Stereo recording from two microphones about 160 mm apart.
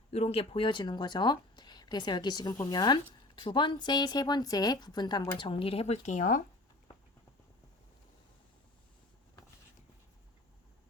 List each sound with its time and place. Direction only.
0.1 s speech: 40° left (ahead or behind); by 5.5 s 25° left (ahead or behind)
5.5 s speech: 35° left (ahead or behind); by 6.4 s 50° left (ahead or behind)